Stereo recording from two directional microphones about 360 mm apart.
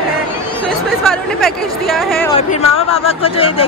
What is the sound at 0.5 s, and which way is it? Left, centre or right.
Speech, centre.